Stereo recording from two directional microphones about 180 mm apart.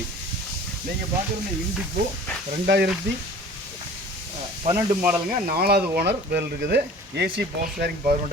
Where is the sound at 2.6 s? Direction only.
65° right (ahead or behind).